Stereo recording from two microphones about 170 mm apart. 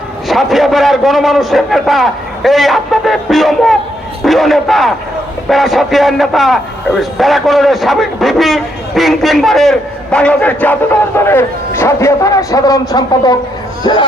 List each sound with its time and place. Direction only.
0.3 s a man's voice: centre (ahead or behind); by 14.0 s 30° left (ahead or behind)